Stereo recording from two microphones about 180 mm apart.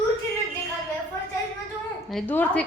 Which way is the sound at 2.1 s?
5° left (ahead or behind).